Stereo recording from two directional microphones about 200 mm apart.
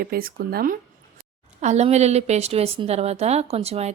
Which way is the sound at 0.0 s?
50° right (ahead or behind).